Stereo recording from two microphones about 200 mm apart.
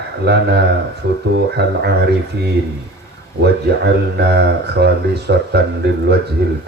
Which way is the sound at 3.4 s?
55° right (ahead or behind).